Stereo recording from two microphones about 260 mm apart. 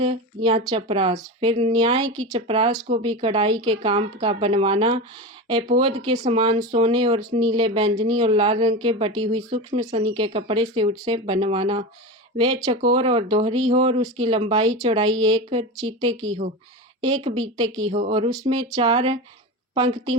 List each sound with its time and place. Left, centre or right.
0.0 s speech: right
17.2 s speech: centre